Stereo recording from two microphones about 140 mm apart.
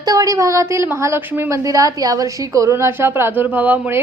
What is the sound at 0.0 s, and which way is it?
A woman's voice, 25° right (ahead or behind).